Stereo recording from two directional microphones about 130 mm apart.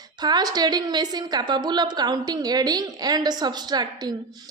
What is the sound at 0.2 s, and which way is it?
A woman's voice, 30° right (ahead or behind).